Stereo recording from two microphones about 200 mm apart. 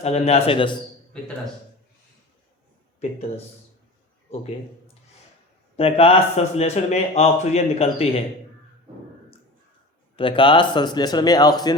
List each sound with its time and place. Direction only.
0.0 s a man's voice: 30° left (ahead or behind)
5.7 s speech: 30° left (ahead or behind)
10.2 s a man's voice: 25° left (ahead or behind)